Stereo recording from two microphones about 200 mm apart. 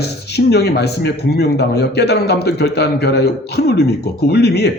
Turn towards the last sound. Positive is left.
turn(degrees=55)  # may be behind; listen again after turning